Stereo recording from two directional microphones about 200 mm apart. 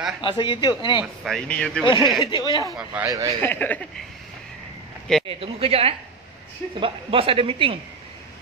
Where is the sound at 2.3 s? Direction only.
20° left (ahead or behind).